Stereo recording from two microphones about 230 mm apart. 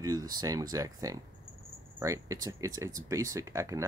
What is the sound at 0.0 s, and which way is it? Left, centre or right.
Speech, centre.